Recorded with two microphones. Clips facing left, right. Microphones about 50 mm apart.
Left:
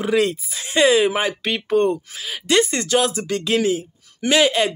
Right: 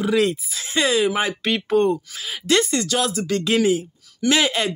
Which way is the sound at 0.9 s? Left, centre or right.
Centre.